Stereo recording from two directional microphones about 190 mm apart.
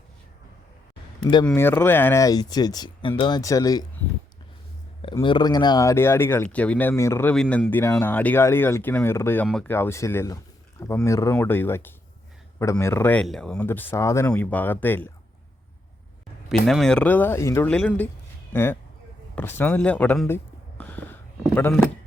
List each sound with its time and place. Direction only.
1.2 s speech: 20° left (ahead or behind)
1.5 s speech: 10° left (ahead or behind)
5.2 s speech: 25° left (ahead or behind)
16.5 s speech: centre (ahead or behind)